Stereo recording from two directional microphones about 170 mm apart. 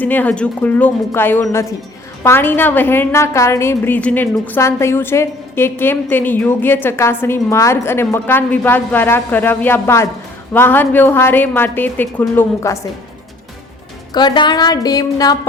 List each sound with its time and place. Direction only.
0.0 s a woman's voice: 10° left (ahead or behind)
14.1 s speech: 25° left (ahead or behind)